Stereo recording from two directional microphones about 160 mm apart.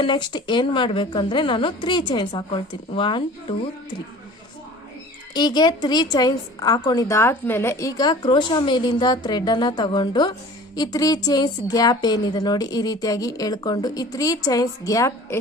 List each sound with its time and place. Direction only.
0.0 s a woman's voice: 30° left (ahead or behind)
5.3 s a woman's voice: 25° left (ahead or behind)